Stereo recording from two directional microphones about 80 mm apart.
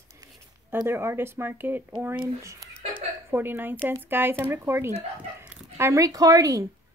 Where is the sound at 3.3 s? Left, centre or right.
Right.